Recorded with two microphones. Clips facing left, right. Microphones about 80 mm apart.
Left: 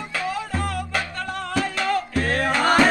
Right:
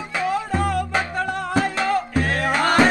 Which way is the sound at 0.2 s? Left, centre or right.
Centre.